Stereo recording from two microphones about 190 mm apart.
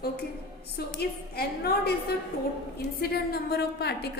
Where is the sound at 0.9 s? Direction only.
55° left (ahead or behind).